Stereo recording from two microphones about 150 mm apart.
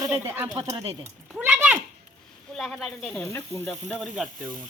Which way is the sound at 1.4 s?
10° right (ahead or behind).